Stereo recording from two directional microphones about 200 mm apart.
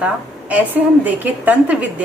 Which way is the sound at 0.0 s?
5° right (ahead or behind).